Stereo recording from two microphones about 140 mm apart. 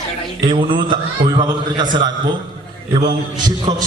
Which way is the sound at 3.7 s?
40° right (ahead or behind).